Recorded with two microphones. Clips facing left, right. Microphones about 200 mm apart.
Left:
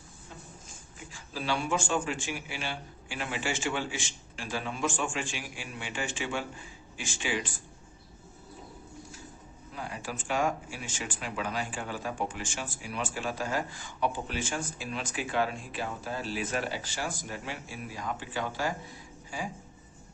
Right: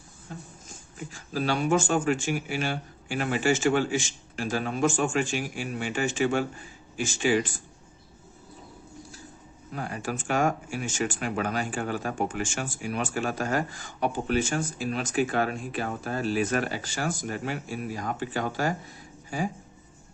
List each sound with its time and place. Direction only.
1.1 s speech: 45° right (ahead or behind)
9.7 s speech: 50° right (ahead or behind)